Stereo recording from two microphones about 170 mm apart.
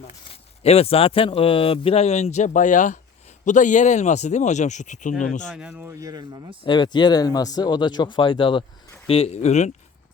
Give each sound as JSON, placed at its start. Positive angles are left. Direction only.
{"t": 0.3, "sound": "speech", "side_deg": 35}
{"t": 5.5, "sound": "speech", "side_deg": -5}
{"t": 5.9, "sound": "speech", "side_deg": -20}
{"t": 6.7, "sound": "speech", "side_deg": 25}